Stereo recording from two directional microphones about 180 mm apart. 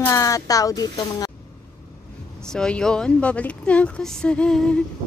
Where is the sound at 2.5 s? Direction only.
5° left (ahead or behind).